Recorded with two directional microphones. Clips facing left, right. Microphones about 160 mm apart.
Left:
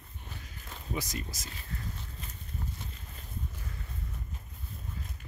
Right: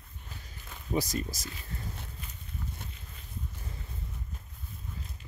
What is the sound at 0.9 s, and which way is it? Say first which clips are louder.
Speech: right 6 dB; 35° right (ahead or behind).